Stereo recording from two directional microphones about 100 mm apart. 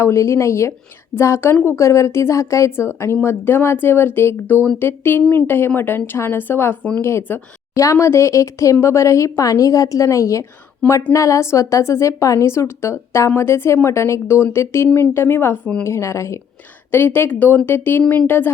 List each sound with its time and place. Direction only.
0.0 s a woman's voice: 30° left (ahead or behind)
7.8 s a woman's voice: 30° left (ahead or behind)
15.9 s a woman's voice: 30° left (ahead or behind)